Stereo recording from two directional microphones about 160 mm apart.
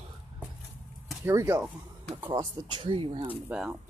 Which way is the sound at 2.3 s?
30° right (ahead or behind).